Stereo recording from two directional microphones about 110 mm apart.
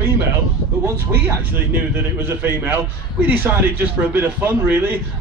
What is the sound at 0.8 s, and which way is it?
A man's voice, 20° right (ahead or behind).